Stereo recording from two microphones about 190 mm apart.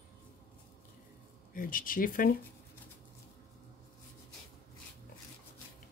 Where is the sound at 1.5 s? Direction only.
45° left (ahead or behind).